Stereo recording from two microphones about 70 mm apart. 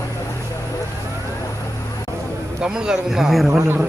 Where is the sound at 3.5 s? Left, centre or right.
Right.